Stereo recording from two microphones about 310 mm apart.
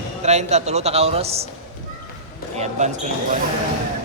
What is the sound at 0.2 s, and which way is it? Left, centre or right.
A man's voice, right.